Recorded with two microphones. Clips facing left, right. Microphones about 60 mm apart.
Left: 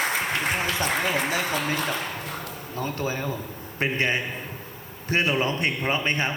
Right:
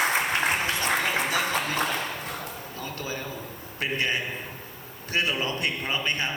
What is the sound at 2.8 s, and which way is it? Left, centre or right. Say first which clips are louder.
A man's voice: left 7 dB; left.